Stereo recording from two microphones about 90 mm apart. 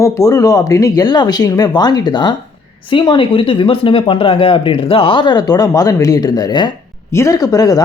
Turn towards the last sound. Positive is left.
turn(degrees=45)  # may be behind; listen again after turning